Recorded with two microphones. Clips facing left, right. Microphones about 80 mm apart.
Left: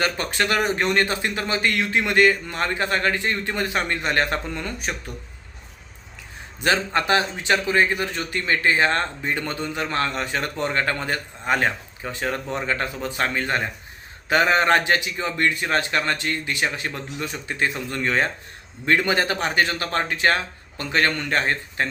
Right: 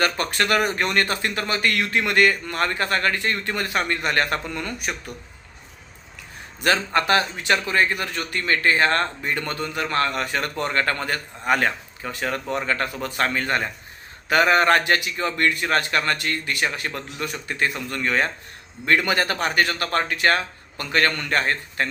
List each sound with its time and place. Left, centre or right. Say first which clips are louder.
0.0 s a man's voice: right 1 dB; left
6.6 s a man's voice: right 1 dB; left